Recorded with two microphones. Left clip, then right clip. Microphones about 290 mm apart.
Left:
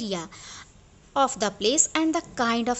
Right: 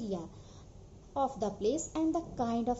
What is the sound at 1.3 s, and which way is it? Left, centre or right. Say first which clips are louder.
A woman's voice: left 9 dB; left.